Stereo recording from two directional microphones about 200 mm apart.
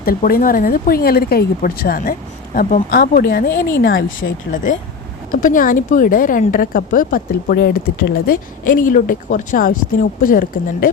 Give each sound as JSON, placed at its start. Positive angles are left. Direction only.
{"t": 0.0, "sound": "speech", "side_deg": 45}
{"t": 4.5, "sound": "speech", "side_deg": 40}